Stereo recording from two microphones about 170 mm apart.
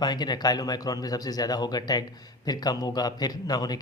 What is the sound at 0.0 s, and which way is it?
Speech, 25° left (ahead or behind).